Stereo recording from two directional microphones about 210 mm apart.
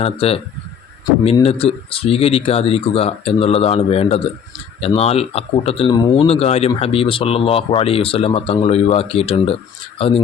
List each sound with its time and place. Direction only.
0.0 s speech: 30° left (ahead or behind)